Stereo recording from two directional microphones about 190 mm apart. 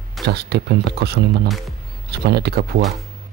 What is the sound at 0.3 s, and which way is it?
Speech, 60° right (ahead or behind).